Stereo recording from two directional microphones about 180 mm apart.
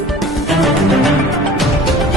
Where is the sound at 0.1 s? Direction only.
Centre (ahead or behind).